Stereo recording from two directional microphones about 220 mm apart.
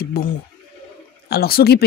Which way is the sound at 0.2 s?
45° left (ahead or behind).